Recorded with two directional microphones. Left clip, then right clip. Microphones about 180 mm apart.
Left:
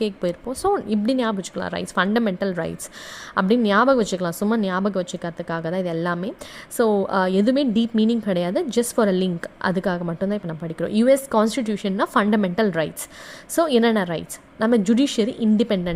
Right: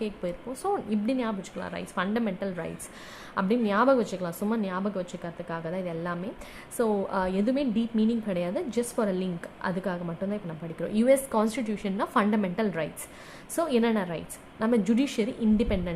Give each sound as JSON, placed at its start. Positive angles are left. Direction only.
{"t": 0.0, "sound": "a woman's voice", "side_deg": 40}